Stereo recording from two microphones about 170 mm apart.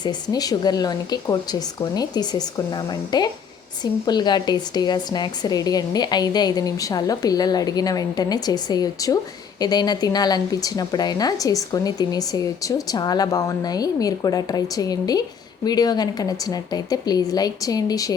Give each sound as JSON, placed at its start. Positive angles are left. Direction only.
{"t": 0.0, "sound": "a woman's voice", "side_deg": 25}